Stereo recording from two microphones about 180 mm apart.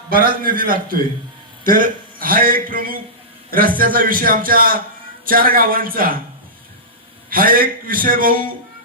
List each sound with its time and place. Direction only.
0.1 s a man's voice: 50° right (ahead or behind)
7.3 s a man's voice: 50° right (ahead or behind)